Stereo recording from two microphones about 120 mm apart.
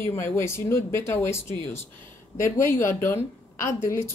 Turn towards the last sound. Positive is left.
turn(degrees=20)  # may be behind; listen again after turning